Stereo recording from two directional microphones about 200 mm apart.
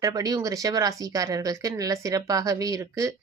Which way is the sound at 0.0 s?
20° right (ahead or behind).